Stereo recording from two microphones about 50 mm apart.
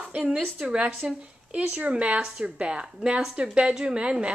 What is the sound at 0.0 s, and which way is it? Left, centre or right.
A woman's voice, right.